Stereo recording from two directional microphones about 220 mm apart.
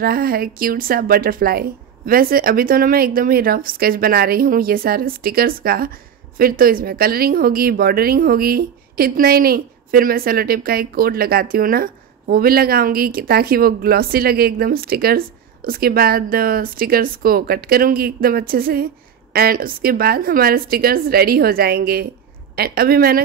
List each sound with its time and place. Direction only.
0.0 s a woman's voice: 40° right (ahead or behind)